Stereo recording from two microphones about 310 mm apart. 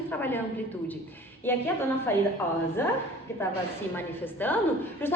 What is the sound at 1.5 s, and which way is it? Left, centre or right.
A woman's voice, centre.